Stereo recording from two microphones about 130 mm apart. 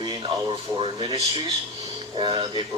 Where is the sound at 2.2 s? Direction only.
40° right (ahead or behind).